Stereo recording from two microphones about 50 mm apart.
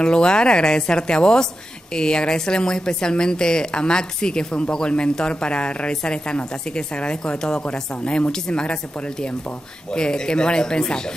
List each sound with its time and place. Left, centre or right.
0.0 s a woman's voice: centre
9.9 s a woman's voice: centre